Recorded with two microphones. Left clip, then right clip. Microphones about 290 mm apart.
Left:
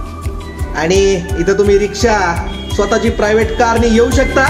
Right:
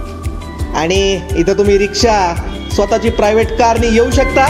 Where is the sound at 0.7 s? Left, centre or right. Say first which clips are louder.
Left 1 dB; right.